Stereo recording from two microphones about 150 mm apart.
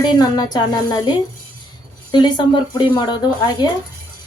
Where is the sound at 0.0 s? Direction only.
30° left (ahead or behind).